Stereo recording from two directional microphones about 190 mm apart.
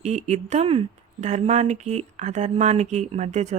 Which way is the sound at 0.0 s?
35° right (ahead or behind).